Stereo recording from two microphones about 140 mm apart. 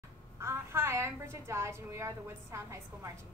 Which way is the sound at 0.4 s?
20° right (ahead or behind).